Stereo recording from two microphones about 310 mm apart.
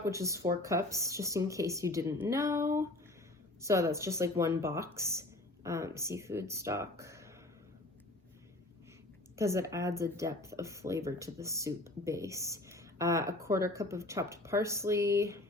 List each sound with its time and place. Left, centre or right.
0.0 s speech: centre
9.3 s speech: centre